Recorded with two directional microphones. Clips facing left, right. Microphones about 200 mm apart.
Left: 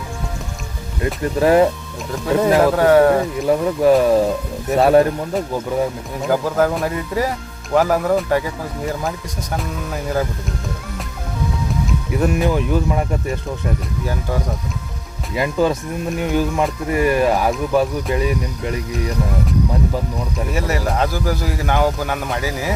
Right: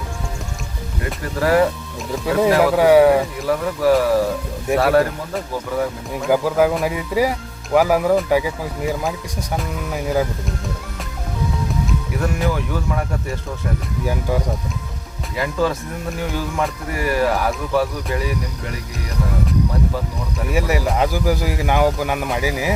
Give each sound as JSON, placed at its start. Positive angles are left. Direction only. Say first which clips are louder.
{"t": 1.0, "sound": "speech", "louder": "left 5 dB", "side_deg": 20}
{"t": 2.1, "sound": "speech", "louder": "left 1 dB", "side_deg": -10}
{"t": 3.4, "sound": "speech", "louder": "left 3 dB", "side_deg": 20}
{"t": 6.3, "sound": "speech", "louder": "right 1 dB", "side_deg": -10}
{"t": 12.2, "sound": "speech", "louder": "left 5 dB", "side_deg": 20}
{"t": 14.0, "sound": "speech", "louder": "right 4 dB", "side_deg": -10}
{"t": 15.4, "sound": "speech", "louder": "left 3 dB", "side_deg": 15}
{"t": 20.5, "sound": "speech", "louder": "right 3 dB", "side_deg": -10}